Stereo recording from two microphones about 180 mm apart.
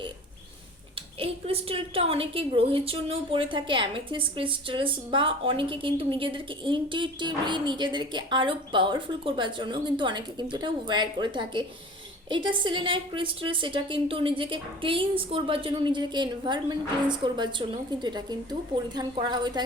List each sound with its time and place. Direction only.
1.2 s a woman's voice: 30° right (ahead or behind)